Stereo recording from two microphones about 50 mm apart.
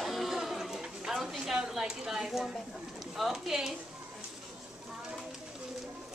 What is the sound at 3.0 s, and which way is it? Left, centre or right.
Speech, centre.